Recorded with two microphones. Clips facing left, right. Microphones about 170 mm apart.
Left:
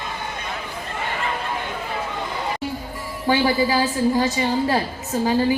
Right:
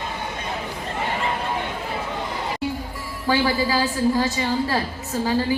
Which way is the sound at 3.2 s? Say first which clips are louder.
Left 2 dB; 20° left (ahead or behind).